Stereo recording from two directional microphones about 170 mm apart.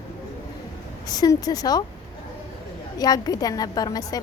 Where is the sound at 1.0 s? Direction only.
20° left (ahead or behind).